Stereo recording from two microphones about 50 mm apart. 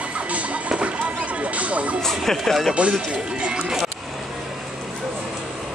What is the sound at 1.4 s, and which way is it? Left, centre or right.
Vehicle, right.